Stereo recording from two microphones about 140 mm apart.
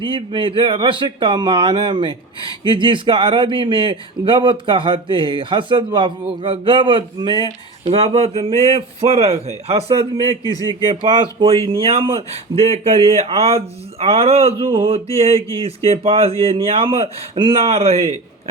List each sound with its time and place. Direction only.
0.0 s speech: 35° right (ahead or behind)
10.4 s speech: 30° left (ahead or behind)
11.0 s speech: 35° right (ahead or behind)
17.6 s speech: 50° right (ahead or behind)